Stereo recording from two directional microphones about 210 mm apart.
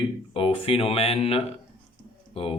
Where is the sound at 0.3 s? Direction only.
25° left (ahead or behind).